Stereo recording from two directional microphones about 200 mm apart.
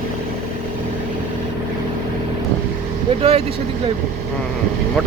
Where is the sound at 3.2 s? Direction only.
30° right (ahead or behind).